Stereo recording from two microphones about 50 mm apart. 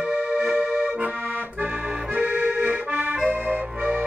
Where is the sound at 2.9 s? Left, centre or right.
Right.